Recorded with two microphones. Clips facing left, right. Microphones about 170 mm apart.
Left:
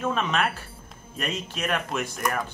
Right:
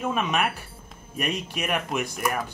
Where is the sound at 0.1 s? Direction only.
10° right (ahead or behind).